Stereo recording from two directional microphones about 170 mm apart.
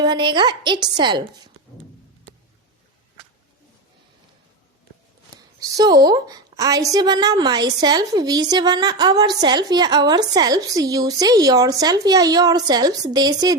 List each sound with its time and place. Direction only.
0.0 s a woman's voice: 25° right (ahead or behind)
5.5 s a woman's voice: 25° right (ahead or behind)